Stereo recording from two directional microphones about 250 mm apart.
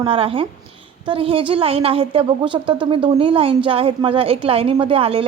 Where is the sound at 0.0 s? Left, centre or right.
Right.